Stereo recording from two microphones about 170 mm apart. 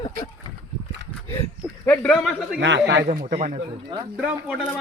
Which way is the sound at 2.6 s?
90° right.